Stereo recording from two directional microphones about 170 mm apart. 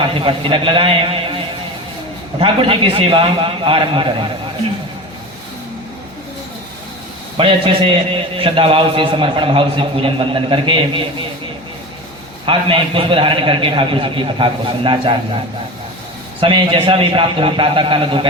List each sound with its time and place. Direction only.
0.0 s a man's voice: 30° right (ahead or behind)
2.4 s a man's voice: 30° right (ahead or behind)
7.3 s a man's voice: 30° right (ahead or behind)
12.5 s a man's voice: 30° right (ahead or behind)
16.4 s a man's voice: 30° right (ahead or behind)